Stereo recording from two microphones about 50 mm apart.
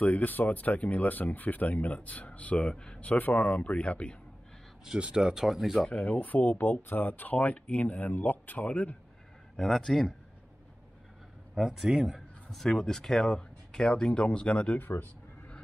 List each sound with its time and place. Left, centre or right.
0.0 s speech: left; by 3.0 s centre
3.0 s speech: left
4.8 s speech: centre
5.9 s speech: left
9.6 s a man's voice: centre
11.5 s speech: centre
12.2 s a man's voice: centre; by 14.8 s left
14.8 s a sound: left